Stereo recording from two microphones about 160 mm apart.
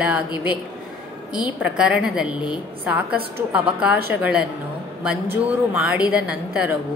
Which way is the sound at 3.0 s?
75° right (ahead or behind).